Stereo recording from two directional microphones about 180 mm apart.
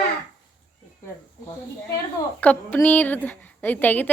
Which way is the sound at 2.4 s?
10° left (ahead or behind).